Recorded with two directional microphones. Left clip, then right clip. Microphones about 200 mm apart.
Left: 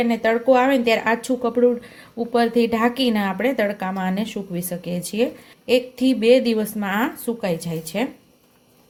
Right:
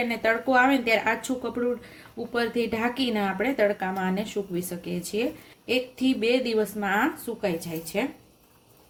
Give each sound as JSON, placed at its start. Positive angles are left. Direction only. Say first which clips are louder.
{"t": 0.1, "sound": "speech", "louder": "left 6 dB", "side_deg": 30}